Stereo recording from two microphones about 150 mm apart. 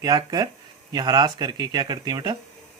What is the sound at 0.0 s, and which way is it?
Speech, 25° right (ahead or behind).